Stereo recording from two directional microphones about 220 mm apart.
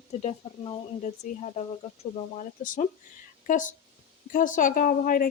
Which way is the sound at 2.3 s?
35° left (ahead or behind).